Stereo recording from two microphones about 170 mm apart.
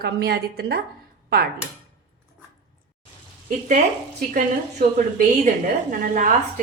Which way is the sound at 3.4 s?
50° right (ahead or behind).